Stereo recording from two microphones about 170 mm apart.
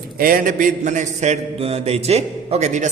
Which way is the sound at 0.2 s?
55° right (ahead or behind).